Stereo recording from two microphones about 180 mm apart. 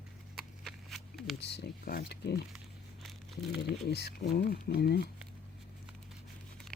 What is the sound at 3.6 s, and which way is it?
Speech, 65° left (ahead or behind).